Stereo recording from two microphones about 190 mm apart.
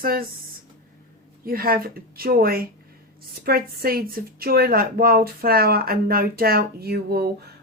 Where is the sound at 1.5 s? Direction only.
50° right (ahead or behind).